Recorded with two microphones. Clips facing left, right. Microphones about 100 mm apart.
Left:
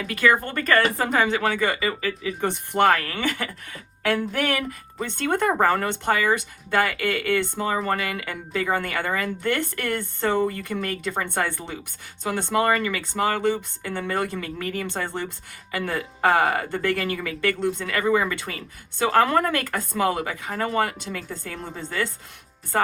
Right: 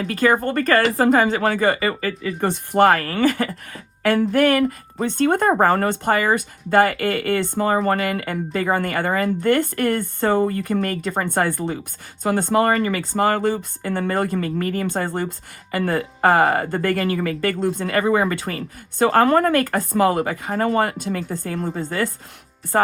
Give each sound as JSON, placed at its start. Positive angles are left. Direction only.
{"t": 0.0, "sound": "speech", "side_deg": -40}